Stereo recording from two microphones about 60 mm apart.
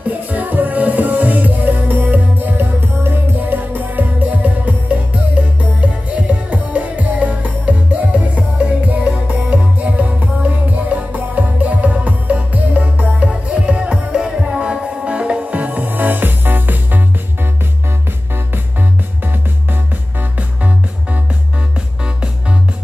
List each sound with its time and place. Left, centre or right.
0.3 s music: right
6.5 s music: right
18.3 s music: right
20.3 s music: right